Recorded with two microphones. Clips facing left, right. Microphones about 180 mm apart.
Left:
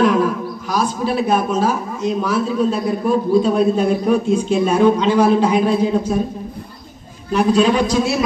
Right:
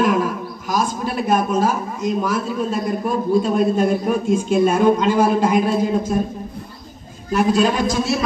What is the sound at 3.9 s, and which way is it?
Speech, 5° right (ahead or behind).